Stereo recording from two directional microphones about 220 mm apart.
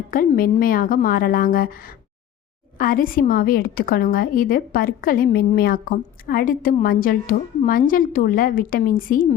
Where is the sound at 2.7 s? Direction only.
40° left (ahead or behind).